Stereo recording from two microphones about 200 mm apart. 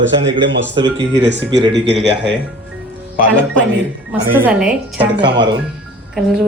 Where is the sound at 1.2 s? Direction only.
60° right (ahead or behind).